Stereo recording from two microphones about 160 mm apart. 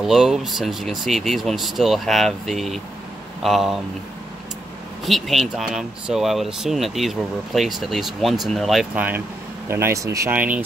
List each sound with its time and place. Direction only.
0.0 s speech: centre (ahead or behind)
5.0 s speech: centre (ahead or behind)
8.9 s speech: 10° right (ahead or behind)
10.3 s speech: 10° right (ahead or behind)